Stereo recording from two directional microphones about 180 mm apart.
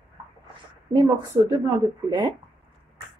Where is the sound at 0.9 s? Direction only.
20° right (ahead or behind).